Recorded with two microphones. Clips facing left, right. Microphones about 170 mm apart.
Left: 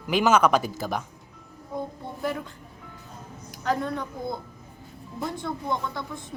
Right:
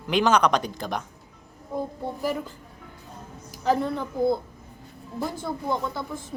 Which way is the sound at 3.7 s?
10° right (ahead or behind).